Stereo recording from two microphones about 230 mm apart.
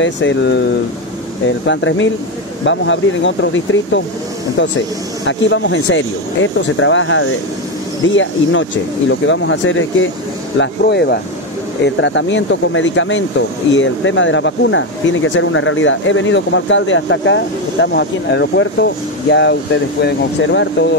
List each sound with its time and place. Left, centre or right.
0.0 s speech: left
1.7 s speech: left